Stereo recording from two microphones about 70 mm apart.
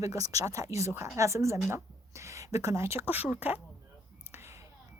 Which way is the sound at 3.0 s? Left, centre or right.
Right.